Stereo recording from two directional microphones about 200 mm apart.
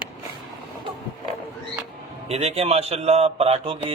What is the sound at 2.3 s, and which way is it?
Speech, 30° right (ahead or behind).